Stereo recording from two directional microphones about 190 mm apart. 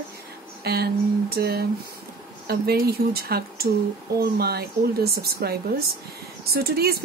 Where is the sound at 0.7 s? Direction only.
55° right (ahead or behind).